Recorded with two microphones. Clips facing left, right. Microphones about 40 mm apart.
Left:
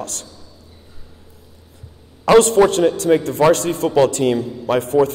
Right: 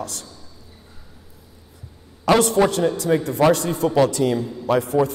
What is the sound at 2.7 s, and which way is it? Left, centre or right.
A man's voice, left.